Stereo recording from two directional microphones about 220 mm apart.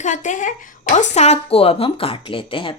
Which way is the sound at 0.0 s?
35° left (ahead or behind).